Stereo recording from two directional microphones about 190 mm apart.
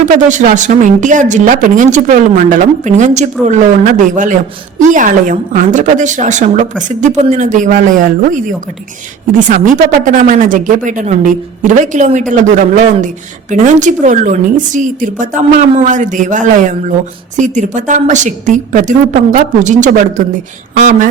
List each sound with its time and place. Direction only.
0.0 s a woman's voice: 40° right (ahead or behind)
10.0 s a woman's voice: 45° right (ahead or behind)